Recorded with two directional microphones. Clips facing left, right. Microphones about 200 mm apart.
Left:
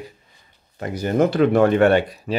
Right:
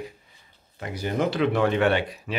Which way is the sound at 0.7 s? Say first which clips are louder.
Left 7 dB; 45° left (ahead or behind).